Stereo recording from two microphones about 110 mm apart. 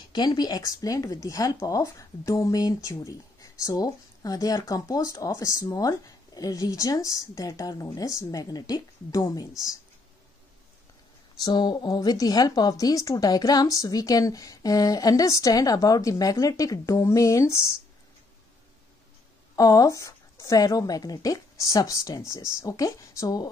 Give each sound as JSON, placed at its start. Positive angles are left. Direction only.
{"t": 0.1, "sound": "a woman's voice", "side_deg": 40}
{"t": 11.3, "sound": "a woman's voice", "side_deg": 40}
{"t": 19.5, "sound": "a woman's voice", "side_deg": 30}